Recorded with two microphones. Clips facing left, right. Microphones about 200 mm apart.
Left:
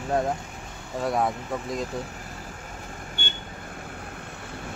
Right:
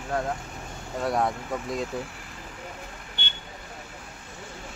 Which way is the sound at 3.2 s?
45° left (ahead or behind).